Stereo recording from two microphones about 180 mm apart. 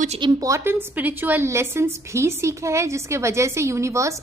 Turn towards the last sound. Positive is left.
turn(degrees=-15)  # may be behind; listen again after turning